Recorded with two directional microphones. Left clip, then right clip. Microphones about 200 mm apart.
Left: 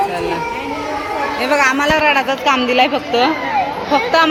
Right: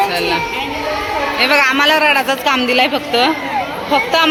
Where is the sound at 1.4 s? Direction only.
Centre (ahead or behind).